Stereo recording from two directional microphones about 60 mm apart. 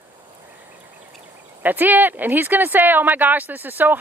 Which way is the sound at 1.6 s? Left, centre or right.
Right.